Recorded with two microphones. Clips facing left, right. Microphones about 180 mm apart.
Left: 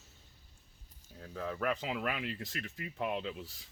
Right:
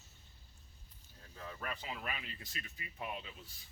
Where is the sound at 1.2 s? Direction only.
70° left (ahead or behind).